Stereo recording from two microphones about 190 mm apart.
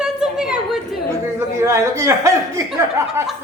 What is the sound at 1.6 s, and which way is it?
A woman's voice, 15° right (ahead or behind).